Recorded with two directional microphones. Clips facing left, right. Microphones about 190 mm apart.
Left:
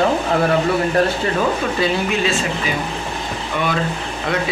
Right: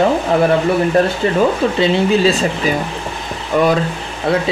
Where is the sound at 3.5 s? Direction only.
40° right (ahead or behind).